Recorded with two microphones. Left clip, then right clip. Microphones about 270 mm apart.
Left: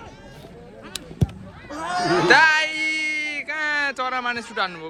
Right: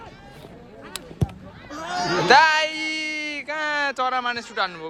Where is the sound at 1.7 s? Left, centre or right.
Left.